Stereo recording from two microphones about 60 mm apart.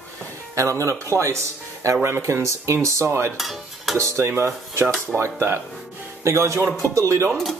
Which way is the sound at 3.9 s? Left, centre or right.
Right.